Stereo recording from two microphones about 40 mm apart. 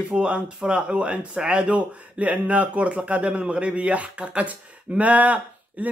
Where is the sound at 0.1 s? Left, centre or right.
Right.